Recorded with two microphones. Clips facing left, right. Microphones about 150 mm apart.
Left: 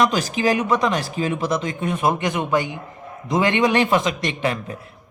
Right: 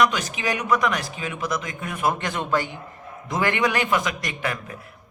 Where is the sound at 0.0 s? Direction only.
30° left (ahead or behind).